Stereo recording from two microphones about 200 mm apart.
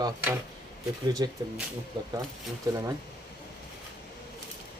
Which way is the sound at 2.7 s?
15° right (ahead or behind).